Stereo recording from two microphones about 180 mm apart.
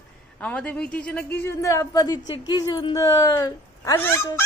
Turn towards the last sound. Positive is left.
turn(degrees=15)  # may be behind; listen again after turning